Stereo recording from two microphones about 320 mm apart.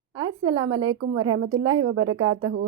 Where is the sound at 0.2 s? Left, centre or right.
Centre.